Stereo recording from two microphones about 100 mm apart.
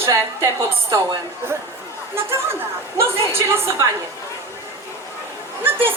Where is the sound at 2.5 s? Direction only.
25° right (ahead or behind).